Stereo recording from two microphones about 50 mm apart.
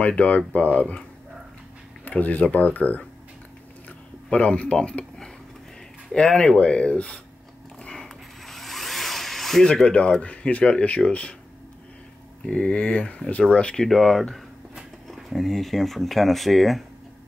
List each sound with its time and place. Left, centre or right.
0.0 s speech: left
2.0 s speech: left
4.3 s speech: left
7.9 s ratchet: centre
9.8 s speech: left
12.7 s speech: left
13.8 s speech: centre
15.2 s speech: centre